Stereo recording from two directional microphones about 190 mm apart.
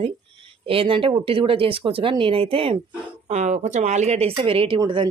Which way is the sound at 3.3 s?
40° right (ahead or behind).